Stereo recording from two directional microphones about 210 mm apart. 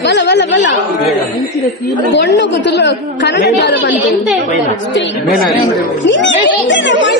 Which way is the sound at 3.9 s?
Centre (ahead or behind).